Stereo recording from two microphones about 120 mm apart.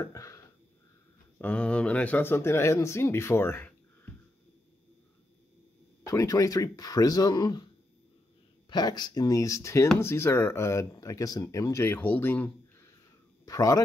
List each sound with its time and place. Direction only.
0.0 s speech: 25° left (ahead or behind)
1.4 s speech: 10° left (ahead or behind)
6.0 s speech: 25° left (ahead or behind)
8.6 s speech: 35° left (ahead or behind); by 12.4 s 15° left (ahead or behind)
13.5 s speech: 30° left (ahead or behind)